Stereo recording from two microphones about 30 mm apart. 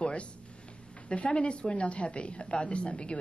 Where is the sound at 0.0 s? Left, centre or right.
Left.